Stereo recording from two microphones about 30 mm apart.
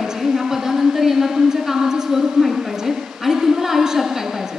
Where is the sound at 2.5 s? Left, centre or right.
Centre.